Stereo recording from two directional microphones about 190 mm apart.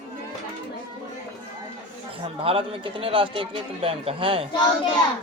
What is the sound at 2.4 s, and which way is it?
A man's voice, 30° right (ahead or behind).